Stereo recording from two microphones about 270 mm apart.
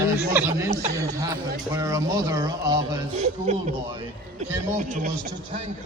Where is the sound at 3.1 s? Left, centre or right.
Right.